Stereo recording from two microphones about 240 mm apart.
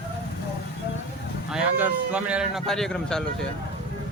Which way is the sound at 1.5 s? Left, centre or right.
Centre.